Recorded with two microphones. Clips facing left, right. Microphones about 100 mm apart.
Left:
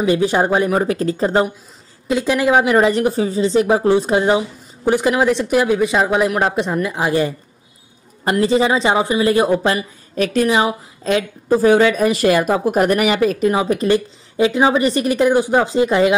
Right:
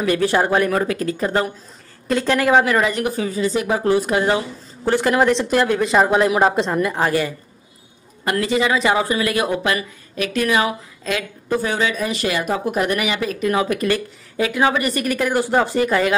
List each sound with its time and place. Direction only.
0.0 s a woman's voice: 20° left (ahead or behind)
2.0 s a woman's voice: 10° left (ahead or behind)
2.8 s a woman's voice: 30° left (ahead or behind); by 7.1 s 5° left (ahead or behind)
7.1 s a woman's voice: 30° left (ahead or behind)
11.7 s speech: 45° left (ahead or behind)
13.5 s a woman's voice: 25° left (ahead or behind)